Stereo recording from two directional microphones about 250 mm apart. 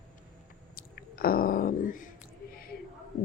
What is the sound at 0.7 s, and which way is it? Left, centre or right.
Chewing, left.